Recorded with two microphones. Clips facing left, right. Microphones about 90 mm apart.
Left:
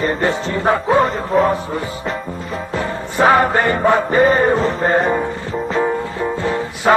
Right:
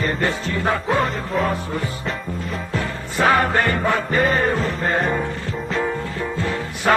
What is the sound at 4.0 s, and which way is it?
Chant, 30° left (ahead or behind).